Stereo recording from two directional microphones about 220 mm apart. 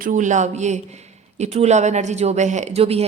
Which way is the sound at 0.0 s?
35° right (ahead or behind).